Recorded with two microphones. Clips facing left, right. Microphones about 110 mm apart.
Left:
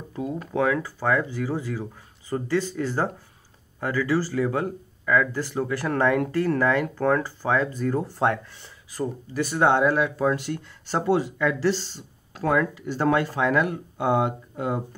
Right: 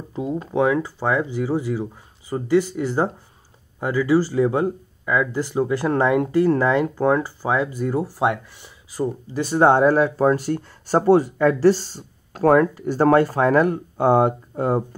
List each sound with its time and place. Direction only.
0.1 s speech: 20° right (ahead or behind)
9.4 s speech: 30° right (ahead or behind)